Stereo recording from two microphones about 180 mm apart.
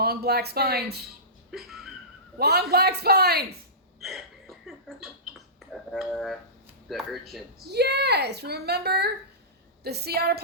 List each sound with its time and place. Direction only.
0.0 s a woman's voice: 60° right (ahead or behind)
1.5 s a sound: centre (ahead or behind)
2.4 s a woman's voice: 60° right (ahead or behind)
4.0 s a sound: centre (ahead or behind)
5.5 s speech: centre (ahead or behind)
7.7 s a woman's voice: 65° right (ahead or behind)